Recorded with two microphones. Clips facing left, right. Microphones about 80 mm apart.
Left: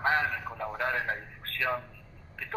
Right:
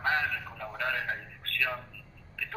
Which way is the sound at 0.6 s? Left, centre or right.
Left.